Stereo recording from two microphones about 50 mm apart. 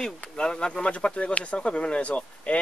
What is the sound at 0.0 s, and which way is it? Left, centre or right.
Speech, centre.